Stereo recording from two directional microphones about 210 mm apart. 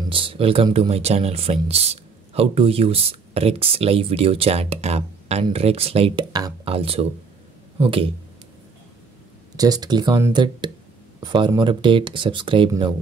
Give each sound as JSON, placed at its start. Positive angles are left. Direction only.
{"t": 0.1, "sound": "speech", "side_deg": -25}
{"t": 9.6, "sound": "speech", "side_deg": -20}